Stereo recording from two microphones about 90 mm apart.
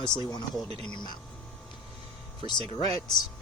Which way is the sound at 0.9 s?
50° left (ahead or behind).